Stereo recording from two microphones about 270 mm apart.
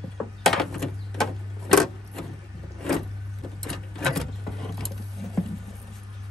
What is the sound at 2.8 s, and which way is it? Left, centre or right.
Vehicle, centre.